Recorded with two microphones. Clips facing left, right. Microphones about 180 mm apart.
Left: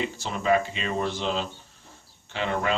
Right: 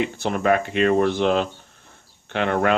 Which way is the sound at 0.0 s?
60° right (ahead or behind).